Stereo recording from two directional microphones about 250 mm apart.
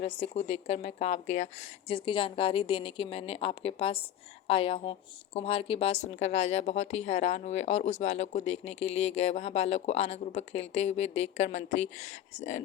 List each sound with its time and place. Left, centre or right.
0.0 s a woman's voice: left